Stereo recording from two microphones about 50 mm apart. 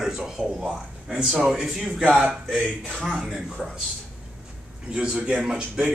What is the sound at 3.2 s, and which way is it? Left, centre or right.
Speech, centre.